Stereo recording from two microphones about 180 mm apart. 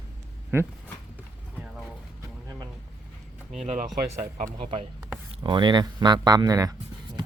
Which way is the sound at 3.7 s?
40° right (ahead or behind).